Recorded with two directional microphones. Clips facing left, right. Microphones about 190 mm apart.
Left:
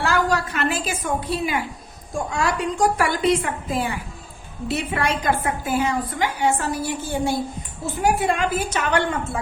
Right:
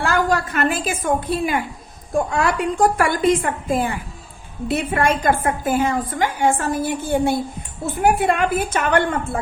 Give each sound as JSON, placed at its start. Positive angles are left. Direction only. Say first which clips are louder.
{"t": 0.0, "sound": "a woman's voice", "louder": "right 2 dB", "side_deg": -50}